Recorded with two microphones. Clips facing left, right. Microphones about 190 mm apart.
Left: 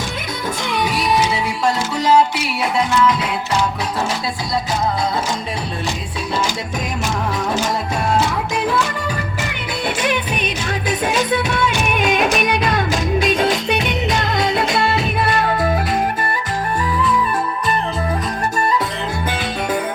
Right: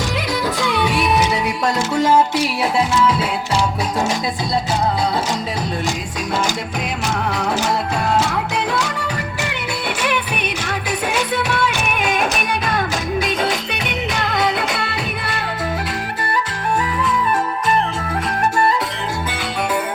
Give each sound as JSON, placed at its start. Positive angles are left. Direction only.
{"t": 10.0, "sound": "music", "side_deg": -60}